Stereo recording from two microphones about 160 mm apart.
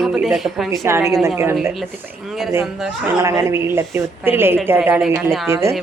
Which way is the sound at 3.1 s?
15° right (ahead or behind).